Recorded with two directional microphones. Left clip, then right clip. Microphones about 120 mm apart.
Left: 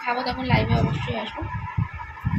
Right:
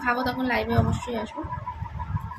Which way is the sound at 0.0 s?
15° right (ahead or behind).